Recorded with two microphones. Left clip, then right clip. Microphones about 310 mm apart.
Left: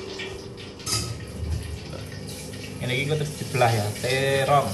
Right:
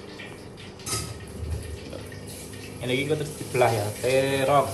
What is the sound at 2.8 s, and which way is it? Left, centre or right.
Speech, centre.